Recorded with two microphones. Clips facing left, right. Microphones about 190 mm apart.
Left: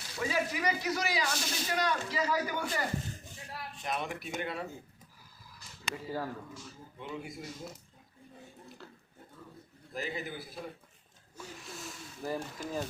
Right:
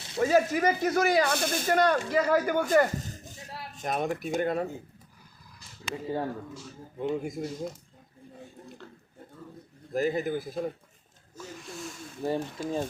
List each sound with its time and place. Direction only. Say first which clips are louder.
0.2 s speech: right 9 dB; 45° right (ahead or behind)
5.9 s speech: right 6 dB; 25° right (ahead or behind)
7.0 s speech: right 11 dB; 45° right (ahead or behind)
9.9 s speech: right 11 dB; 45° right (ahead or behind)
11.5 s snake: right 6 dB; centre (ahead or behind)
12.2 s speech: right 6 dB; 30° right (ahead or behind)